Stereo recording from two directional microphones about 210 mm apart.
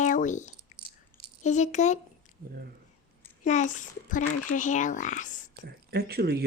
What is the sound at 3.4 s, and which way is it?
Speech, 35° left (ahead or behind).